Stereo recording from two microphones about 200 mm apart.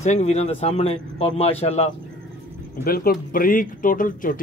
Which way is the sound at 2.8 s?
45° left (ahead or behind).